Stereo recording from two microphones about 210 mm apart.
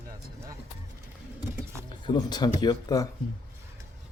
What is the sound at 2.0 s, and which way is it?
Speech, 20° left (ahead or behind).